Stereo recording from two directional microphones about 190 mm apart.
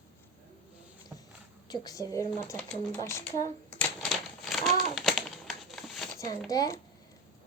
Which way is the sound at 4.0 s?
Centre (ahead or behind).